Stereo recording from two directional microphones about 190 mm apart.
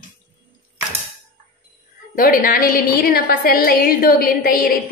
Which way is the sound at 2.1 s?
45° left (ahead or behind).